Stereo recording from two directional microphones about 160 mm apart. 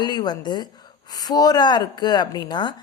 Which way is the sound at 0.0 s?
25° left (ahead or behind).